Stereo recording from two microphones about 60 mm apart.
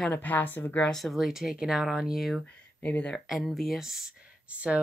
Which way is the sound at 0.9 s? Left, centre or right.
Centre.